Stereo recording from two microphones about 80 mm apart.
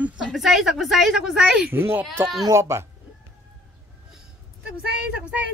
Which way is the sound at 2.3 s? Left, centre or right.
Right.